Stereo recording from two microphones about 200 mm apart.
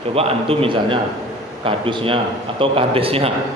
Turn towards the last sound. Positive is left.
turn(degrees=-30)  # may be behind; listen again after turning